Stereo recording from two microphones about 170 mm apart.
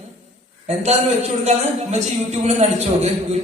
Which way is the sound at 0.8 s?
40° right (ahead or behind).